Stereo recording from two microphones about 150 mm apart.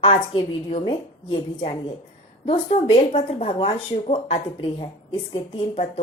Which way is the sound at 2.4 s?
40° left (ahead or behind).